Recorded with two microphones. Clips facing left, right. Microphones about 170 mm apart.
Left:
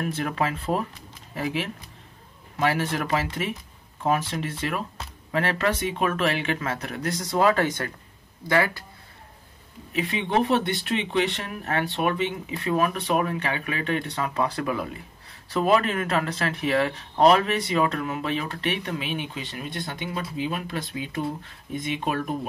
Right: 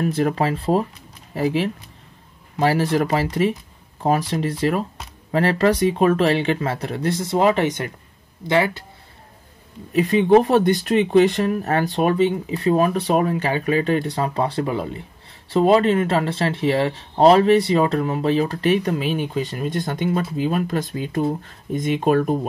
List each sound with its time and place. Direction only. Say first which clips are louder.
0.0 s speech: right 7 dB; 35° right (ahead or behind)
9.9 s speech: right 10 dB; 40° right (ahead or behind)